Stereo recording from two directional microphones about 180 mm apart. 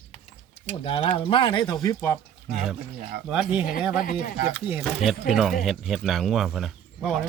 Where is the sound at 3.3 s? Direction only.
5° right (ahead or behind).